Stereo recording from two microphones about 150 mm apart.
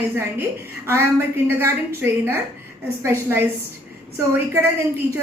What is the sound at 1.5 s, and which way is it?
A woman's voice, 15° right (ahead or behind).